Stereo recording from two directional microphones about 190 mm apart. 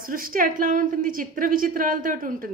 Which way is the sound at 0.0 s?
50° right (ahead or behind).